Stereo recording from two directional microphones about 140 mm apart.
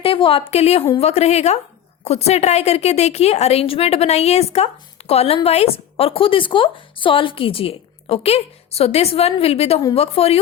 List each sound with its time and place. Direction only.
0.0 s a woman's voice: 40° left (ahead or behind)